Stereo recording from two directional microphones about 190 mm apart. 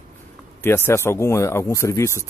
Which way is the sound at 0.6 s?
10° left (ahead or behind).